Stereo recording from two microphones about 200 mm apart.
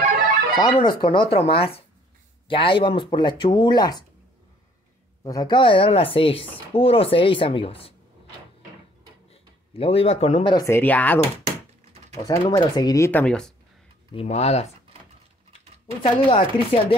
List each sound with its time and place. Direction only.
0.6 s speech: 20° left (ahead or behind)
5.2 s speech: 20° left (ahead or behind)
9.3 s speech: 30° left (ahead or behind); by 11.1 s 10° left (ahead or behind)
12.2 s speech: 20° left (ahead or behind)
14.1 s speech: 30° left (ahead or behind)
16.0 s speech: 25° left (ahead or behind)